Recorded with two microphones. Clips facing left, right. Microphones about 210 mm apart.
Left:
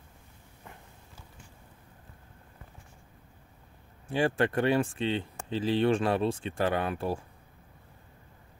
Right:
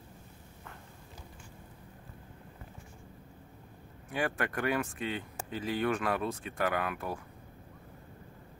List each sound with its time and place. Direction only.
4.1 s speech: 30° left (ahead or behind)